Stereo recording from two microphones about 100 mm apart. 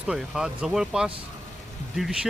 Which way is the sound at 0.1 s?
5° right (ahead or behind).